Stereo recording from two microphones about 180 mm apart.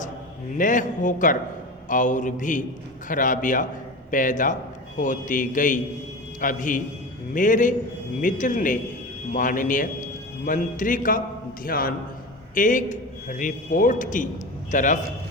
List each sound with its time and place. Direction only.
0.5 s a man's voice: 45° left (ahead or behind)